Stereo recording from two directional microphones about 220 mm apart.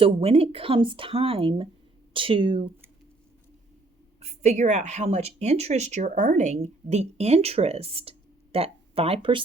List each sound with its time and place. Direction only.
0.0 s speech: 25° right (ahead or behind)
4.2 s speech: 30° right (ahead or behind)